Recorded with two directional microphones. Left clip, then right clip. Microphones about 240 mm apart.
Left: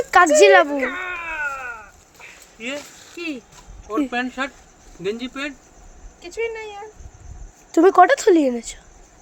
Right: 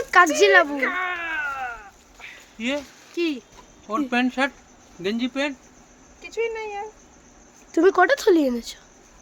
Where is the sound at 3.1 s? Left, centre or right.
Right.